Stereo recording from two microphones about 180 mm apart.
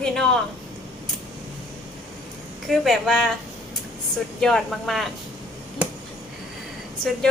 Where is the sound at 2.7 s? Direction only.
Centre (ahead or behind).